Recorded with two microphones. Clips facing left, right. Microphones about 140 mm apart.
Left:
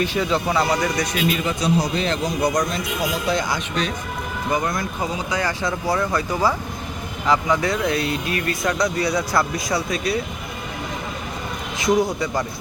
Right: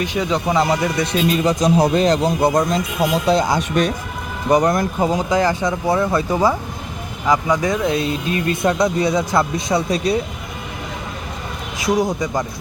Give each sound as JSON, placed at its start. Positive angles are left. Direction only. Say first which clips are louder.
{"t": 0.0, "sound": "speech", "louder": "right 1 dB", "side_deg": -15}
{"t": 5.4, "sound": "speech", "louder": "right 6 dB", "side_deg": -20}
{"t": 11.8, "sound": "speech", "louder": "right 1 dB", "side_deg": -15}